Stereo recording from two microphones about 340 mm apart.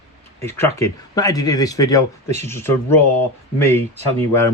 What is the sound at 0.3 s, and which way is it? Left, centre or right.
Speech, centre.